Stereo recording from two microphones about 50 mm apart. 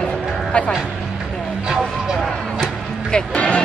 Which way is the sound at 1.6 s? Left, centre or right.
Centre.